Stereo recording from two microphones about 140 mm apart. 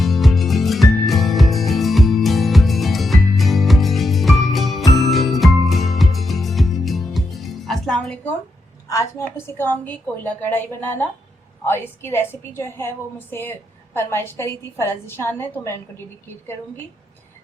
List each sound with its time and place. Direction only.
0.0 s music: centre (ahead or behind)
8.9 s a woman's voice: 25° left (ahead or behind)
9.2 s a woman's voice: 15° left (ahead or behind)